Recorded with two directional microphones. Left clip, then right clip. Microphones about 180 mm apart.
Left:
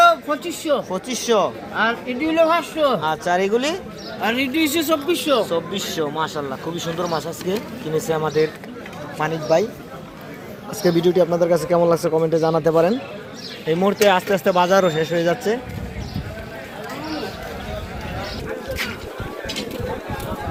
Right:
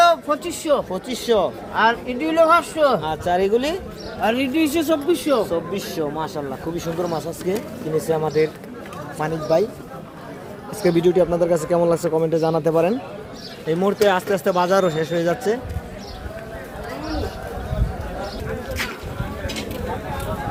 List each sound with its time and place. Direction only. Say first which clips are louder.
0.0 s speech: left 1 dB; 5° right (ahead or behind)
4.2 s speech: even; 45° right (ahead or behind)
5.5 s speech: left 1 dB; centre (ahead or behind)
10.8 s speech: even; 5° right (ahead or behind)